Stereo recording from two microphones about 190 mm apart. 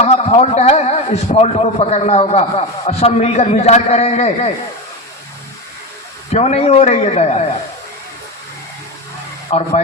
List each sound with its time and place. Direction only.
0.0 s a man's voice: 35° left (ahead or behind)
6.3 s a man's voice: 35° left (ahead or behind)
9.5 s a man's voice: 35° left (ahead or behind)